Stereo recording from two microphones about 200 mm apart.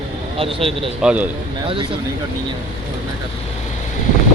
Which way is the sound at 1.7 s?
25° right (ahead or behind).